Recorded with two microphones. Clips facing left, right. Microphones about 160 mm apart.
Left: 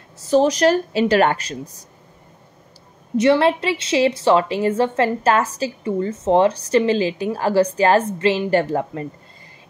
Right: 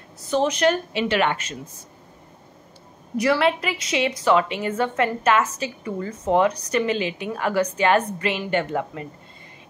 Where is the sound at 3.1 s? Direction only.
25° left (ahead or behind).